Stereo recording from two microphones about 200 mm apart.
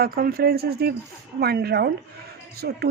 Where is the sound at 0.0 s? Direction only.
50° right (ahead or behind).